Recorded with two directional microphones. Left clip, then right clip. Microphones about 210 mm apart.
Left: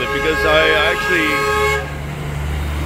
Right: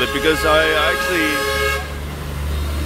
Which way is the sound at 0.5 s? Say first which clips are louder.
Left 3 dB; 15° right (ahead or behind).